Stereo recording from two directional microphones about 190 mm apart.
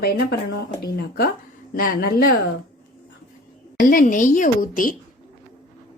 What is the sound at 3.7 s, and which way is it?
A woman's voice, 45° left (ahead or behind).